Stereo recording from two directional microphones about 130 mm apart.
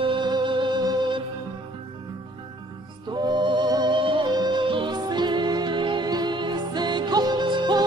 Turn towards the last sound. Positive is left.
turn(degrees=-35)  # may be behind; listen again after turning